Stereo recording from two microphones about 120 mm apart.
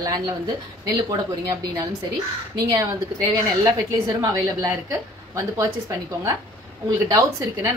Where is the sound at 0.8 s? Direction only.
30° right (ahead or behind).